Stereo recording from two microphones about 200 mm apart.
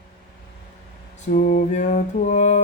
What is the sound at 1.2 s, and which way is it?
Speech, 40° left (ahead or behind).